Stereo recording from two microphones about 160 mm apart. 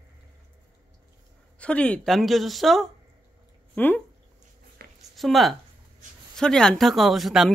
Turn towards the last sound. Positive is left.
turn(degrees=0)  # may be behind; listen again after turning